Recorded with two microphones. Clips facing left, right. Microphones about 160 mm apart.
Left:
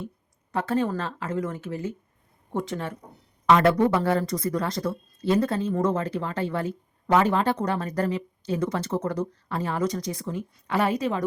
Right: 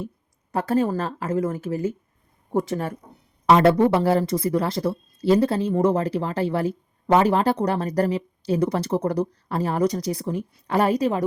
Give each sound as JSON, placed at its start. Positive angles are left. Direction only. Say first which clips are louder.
{"t": 0.5, "sound": "speech", "louder": "right 3 dB", "side_deg": -40}